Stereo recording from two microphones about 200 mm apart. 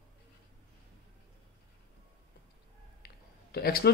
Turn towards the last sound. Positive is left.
turn(degrees=50)  # may be behind; listen again after turning